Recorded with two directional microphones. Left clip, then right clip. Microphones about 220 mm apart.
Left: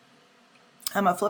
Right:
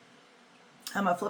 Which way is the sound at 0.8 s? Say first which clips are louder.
Left 5 dB; 50° left (ahead or behind).